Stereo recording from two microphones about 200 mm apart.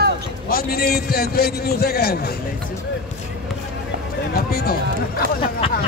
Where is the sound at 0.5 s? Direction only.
50° left (ahead or behind).